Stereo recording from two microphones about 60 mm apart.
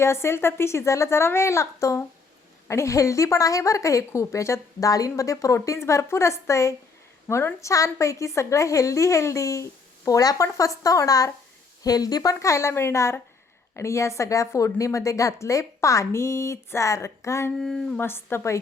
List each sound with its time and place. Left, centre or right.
0.0 s a woman's voice: left
4.9 s a woman's voice: left
7.7 s a woman's voice: left
11.8 s a woman's voice: left
17.6 s a sound: centre
18.0 s a woman's voice: left